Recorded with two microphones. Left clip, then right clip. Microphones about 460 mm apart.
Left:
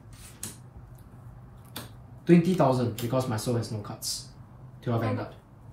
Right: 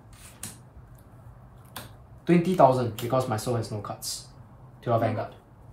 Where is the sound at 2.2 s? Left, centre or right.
Centre.